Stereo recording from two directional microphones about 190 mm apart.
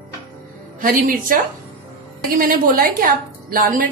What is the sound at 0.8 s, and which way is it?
A woman's voice, 45° right (ahead or behind).